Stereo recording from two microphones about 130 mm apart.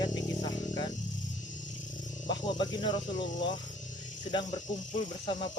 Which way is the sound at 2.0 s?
35° left (ahead or behind).